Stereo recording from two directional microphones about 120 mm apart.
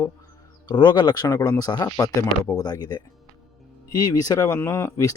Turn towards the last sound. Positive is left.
turn(degrees=25)  # may be behind; listen again after turning